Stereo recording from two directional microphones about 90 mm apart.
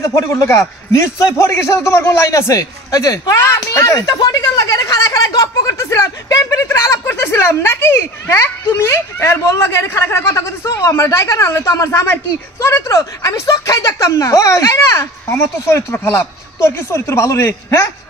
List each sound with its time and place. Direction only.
0.0 s speech: 35° left (ahead or behind)